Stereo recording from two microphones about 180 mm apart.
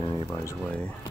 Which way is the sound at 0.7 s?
5° left (ahead or behind).